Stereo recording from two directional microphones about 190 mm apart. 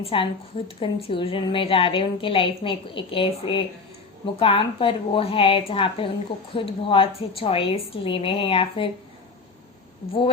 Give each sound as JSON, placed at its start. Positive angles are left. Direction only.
{"t": 0.0, "sound": "a woman's voice", "side_deg": 30}